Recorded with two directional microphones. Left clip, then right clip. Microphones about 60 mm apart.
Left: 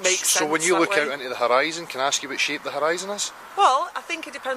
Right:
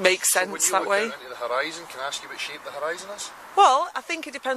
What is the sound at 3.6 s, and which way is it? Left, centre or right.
Speech, right.